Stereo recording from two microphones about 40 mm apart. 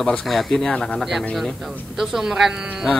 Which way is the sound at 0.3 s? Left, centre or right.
Centre.